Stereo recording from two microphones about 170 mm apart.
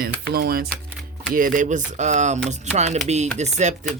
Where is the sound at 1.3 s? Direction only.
50° right (ahead or behind).